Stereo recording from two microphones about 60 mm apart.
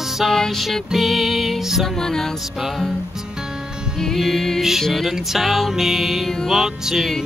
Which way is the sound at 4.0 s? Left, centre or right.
Centre.